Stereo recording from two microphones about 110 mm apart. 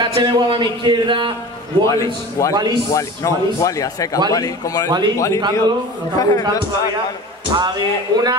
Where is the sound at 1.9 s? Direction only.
30° left (ahead or behind).